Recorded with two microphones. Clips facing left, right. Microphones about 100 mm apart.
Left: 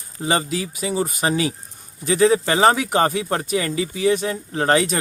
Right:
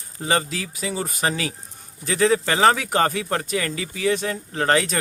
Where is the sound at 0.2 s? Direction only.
10° left (ahead or behind).